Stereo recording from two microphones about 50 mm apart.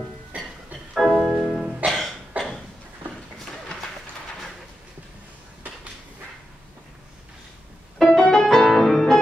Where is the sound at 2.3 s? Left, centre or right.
Right.